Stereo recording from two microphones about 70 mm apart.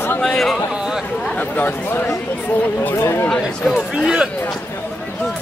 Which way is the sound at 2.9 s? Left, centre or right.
Left.